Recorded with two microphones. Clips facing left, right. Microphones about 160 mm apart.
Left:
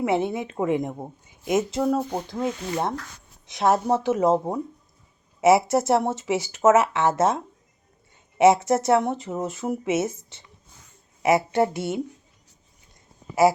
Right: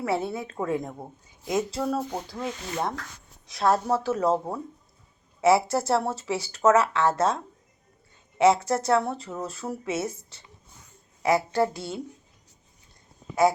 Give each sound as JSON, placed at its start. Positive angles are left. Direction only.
{"t": 0.0, "sound": "speech", "side_deg": 20}